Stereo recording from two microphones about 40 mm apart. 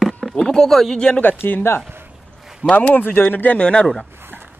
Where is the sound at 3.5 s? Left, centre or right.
Left.